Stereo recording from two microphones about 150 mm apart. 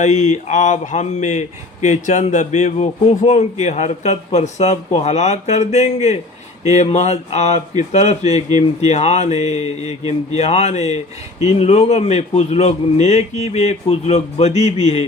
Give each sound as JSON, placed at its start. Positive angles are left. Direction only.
{"t": 0.0, "sound": "speech", "side_deg": 50}